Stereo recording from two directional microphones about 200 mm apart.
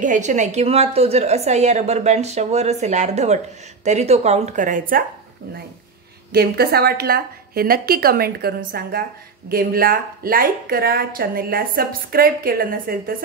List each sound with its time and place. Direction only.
0.0 s a woman's voice: 40° right (ahead or behind)
6.3 s a woman's voice: 50° right (ahead or behind)